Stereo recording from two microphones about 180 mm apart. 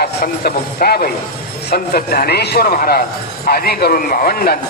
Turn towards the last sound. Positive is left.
turn(degrees=55)  # may be behind; listen again after turning